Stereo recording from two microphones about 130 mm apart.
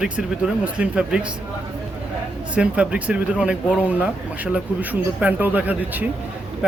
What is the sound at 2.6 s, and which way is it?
Speech, 10° right (ahead or behind).